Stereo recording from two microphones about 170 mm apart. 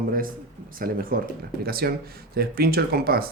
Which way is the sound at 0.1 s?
55° right (ahead or behind).